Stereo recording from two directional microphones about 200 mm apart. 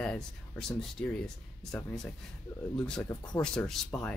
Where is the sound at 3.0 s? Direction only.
15° left (ahead or behind).